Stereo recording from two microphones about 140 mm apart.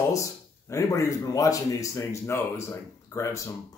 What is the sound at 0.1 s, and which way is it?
Speech, 20° left (ahead or behind).